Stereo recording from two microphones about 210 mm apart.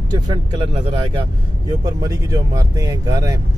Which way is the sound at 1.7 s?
15° right (ahead or behind).